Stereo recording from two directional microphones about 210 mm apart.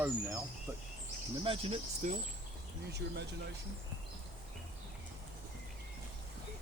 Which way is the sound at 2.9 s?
50° right (ahead or behind).